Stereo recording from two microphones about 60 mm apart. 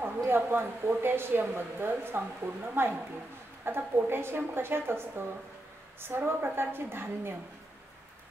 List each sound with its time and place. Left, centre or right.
0.0 s a woman's voice: right